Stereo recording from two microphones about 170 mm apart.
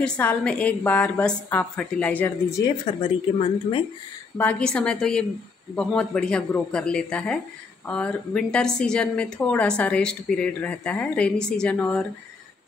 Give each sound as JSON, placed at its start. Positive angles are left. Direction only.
{"t": 0.0, "sound": "a woman's voice", "side_deg": 5}
{"t": 2.6, "sound": "a woman's voice", "side_deg": 25}
{"t": 4.4, "sound": "a woman's voice", "side_deg": 10}